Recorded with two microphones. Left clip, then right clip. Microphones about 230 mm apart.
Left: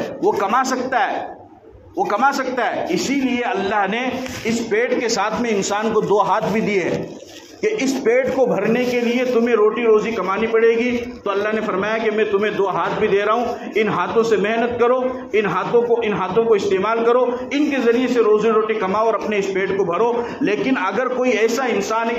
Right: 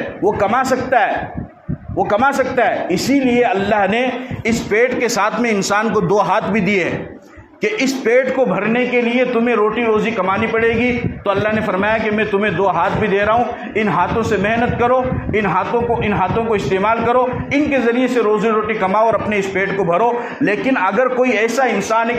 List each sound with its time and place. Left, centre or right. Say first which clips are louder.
0.4 s a man's voice: right 3 dB; right